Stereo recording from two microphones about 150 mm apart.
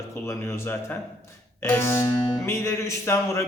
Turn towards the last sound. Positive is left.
turn(degrees=20)  # may be behind; listen again after turning